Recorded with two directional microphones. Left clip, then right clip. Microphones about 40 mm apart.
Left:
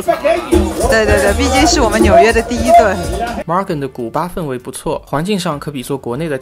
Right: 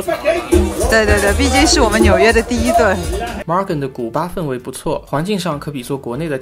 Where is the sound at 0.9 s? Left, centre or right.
Left.